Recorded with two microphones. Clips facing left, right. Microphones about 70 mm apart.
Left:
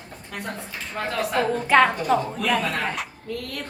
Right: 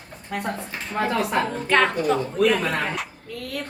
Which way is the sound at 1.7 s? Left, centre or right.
Centre.